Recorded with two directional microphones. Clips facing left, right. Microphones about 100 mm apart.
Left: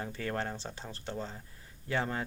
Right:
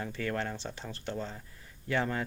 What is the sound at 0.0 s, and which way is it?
Speech, 25° left (ahead or behind).